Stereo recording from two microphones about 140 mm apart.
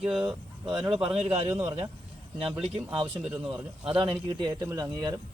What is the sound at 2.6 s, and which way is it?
Speech, 40° right (ahead or behind).